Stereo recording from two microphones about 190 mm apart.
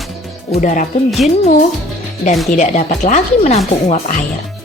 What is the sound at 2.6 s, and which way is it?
Speech, 40° left (ahead or behind).